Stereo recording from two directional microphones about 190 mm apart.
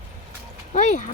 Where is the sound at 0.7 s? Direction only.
40° left (ahead or behind).